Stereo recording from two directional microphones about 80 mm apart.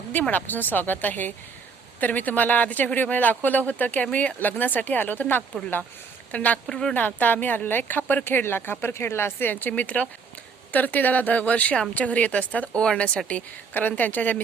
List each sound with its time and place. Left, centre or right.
0.1 s speech: left
6.7 s speech: centre
6.9 s speech: left